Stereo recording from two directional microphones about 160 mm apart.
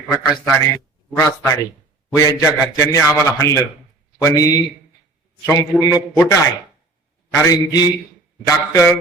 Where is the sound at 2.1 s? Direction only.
20° left (ahead or behind).